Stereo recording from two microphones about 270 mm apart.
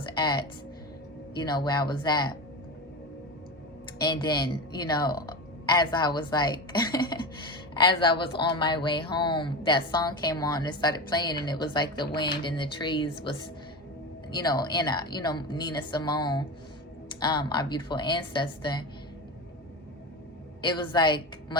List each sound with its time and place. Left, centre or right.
0.2 s speech: centre
3.9 s speech: centre
20.6 s speech: centre